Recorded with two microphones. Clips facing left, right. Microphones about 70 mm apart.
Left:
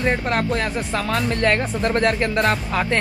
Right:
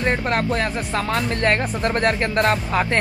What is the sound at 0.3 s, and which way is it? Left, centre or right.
Speech, right.